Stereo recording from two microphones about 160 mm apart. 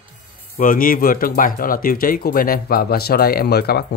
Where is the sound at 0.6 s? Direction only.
60° left (ahead or behind).